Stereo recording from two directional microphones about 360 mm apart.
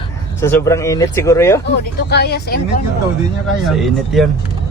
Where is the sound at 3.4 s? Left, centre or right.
Centre.